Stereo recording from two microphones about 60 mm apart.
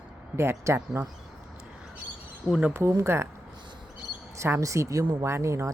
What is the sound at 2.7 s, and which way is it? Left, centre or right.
Speech, right.